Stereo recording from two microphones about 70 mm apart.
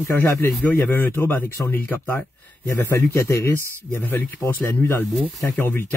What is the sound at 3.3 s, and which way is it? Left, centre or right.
Speech, left.